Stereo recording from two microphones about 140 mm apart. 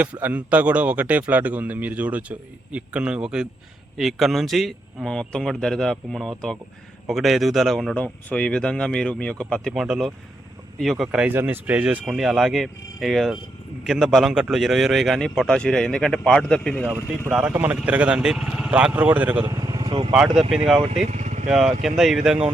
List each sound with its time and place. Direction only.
0.0 s a man's voice: 10° right (ahead or behind); by 16.9 s 5° left (ahead or behind)
17.3 s speech: 10° right (ahead or behind)
19.5 s vehicle: 25° right (ahead or behind)
19.8 s vehicle: 40° right (ahead or behind)
20.7 s speech: 40° right (ahead or behind)
21.0 s speech: 55° right (ahead or behind)
21.5 s a man's voice: 5° right (ahead or behind)